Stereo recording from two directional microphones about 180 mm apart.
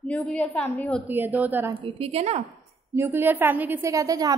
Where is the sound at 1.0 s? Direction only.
10° right (ahead or behind).